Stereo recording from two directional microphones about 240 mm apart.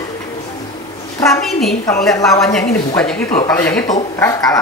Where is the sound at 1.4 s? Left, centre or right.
Centre.